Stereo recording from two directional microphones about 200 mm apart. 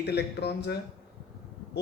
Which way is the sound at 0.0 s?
55° left (ahead or behind).